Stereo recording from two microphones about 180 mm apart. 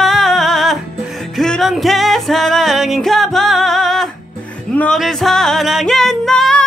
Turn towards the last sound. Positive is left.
turn(degrees=5)  # may be behind; listen again after turning